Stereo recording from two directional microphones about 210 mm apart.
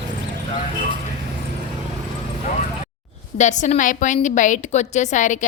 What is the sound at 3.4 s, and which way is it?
A woman's voice, 35° left (ahead or behind).